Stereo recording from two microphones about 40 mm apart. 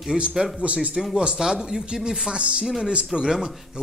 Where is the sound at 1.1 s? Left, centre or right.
Right.